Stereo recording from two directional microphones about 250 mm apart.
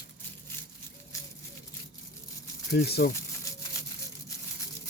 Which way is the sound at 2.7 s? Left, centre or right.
Left.